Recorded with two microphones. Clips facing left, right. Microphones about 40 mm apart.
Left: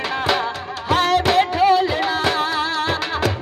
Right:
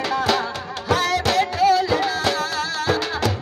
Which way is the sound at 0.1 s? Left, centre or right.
Left.